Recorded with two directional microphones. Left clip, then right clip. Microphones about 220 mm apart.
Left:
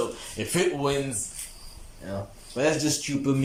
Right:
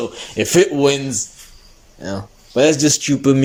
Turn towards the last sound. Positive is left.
turn(degrees=-45)  # may be behind; listen again after turning